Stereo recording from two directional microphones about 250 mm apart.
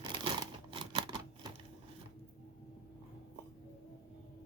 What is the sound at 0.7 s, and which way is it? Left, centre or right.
Typewriter, centre.